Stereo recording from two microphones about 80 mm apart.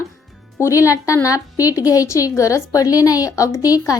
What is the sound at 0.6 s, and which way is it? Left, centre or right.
A woman's voice, left.